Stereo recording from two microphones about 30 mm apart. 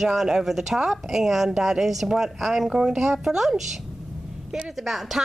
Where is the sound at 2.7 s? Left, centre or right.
Centre.